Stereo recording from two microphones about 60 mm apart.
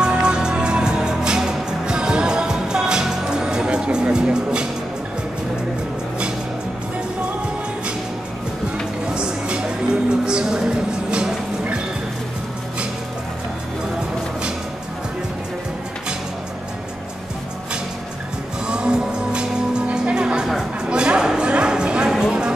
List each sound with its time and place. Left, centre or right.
0.0 s music: centre
9.0 s music: centre
18.7 s music: centre
20.9 s a sound: centre